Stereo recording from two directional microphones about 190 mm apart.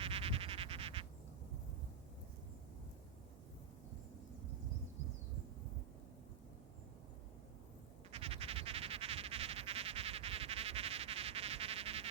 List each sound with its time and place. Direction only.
0.0 s frog: 30° right (ahead or behind)
8.1 s frog: 30° right (ahead or behind)